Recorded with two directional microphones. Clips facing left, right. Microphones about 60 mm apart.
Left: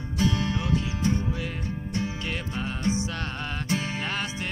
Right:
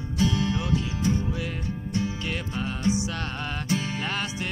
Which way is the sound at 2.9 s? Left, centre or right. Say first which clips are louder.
Right 2 dB; left.